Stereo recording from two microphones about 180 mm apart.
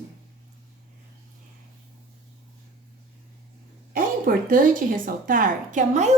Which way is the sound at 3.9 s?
50° right (ahead or behind).